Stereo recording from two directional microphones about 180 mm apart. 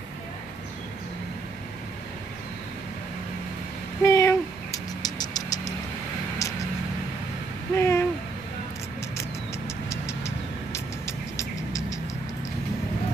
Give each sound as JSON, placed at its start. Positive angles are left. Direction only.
{"t": 4.0, "sound": "a sound", "side_deg": 15}
{"t": 7.7, "sound": "owl", "side_deg": 15}
{"t": 9.8, "sound": "vehicle", "side_deg": 15}